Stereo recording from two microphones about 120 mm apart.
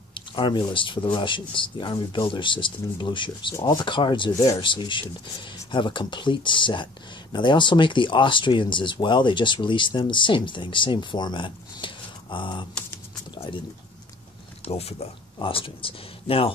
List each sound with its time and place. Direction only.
0.1 s speech: 45° left (ahead or behind)
13.3 s liquid: 45° left (ahead or behind)
14.6 s speech: 60° left (ahead or behind)